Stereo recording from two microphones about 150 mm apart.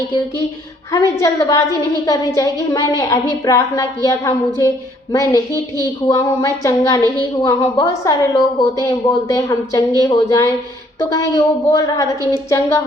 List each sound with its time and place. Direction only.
0.9 s a woman's voice: 20° left (ahead or behind)